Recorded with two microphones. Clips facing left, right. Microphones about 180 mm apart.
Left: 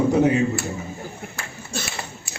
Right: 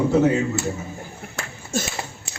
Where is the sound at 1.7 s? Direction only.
45° right (ahead or behind).